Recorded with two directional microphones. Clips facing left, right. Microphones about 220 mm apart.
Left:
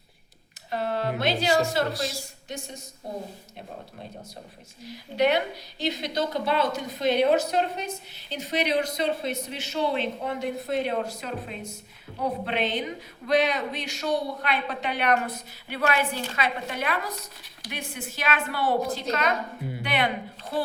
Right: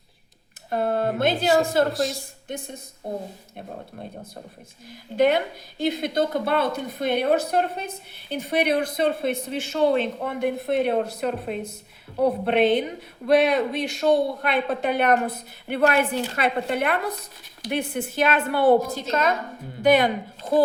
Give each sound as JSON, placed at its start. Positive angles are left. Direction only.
{"t": 0.7, "sound": "a woman's voice", "side_deg": -50}
{"t": 1.9, "sound": "speech", "side_deg": 0}
{"t": 2.1, "sound": "a woman's voice", "side_deg": -55}
{"t": 4.9, "sound": "a woman's voice", "side_deg": -50}